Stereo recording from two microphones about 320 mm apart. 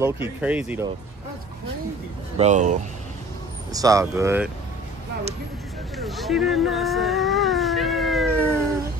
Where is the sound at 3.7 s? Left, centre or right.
Centre.